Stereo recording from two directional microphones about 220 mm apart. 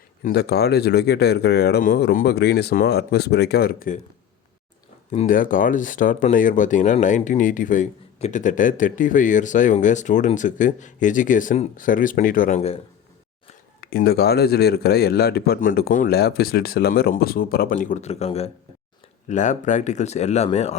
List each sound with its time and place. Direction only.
0.3 s a man's voice: 50° left (ahead or behind)
5.1 s speech: 40° left (ahead or behind)
13.8 s a man's voice: 45° left (ahead or behind); by 20.7 s 30° left (ahead or behind)